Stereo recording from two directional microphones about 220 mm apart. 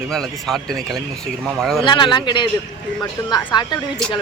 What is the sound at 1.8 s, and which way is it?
Speech, 20° left (ahead or behind).